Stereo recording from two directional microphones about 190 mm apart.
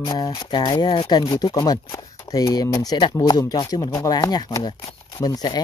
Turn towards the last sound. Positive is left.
turn(degrees=20)  # may be behind; listen again after turning